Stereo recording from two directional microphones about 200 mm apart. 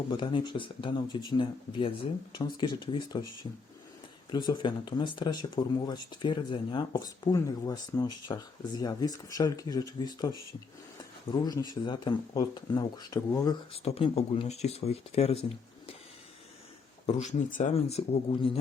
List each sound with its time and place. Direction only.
0.1 s speech: 25° left (ahead or behind)
4.3 s speech: 20° left (ahead or behind)
13.8 s speech: 30° left (ahead or behind)
17.1 s speech: 35° left (ahead or behind)